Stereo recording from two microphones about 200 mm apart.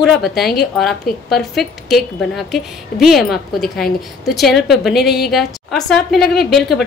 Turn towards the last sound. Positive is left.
turn(degrees=0)  # may be behind; listen again after turning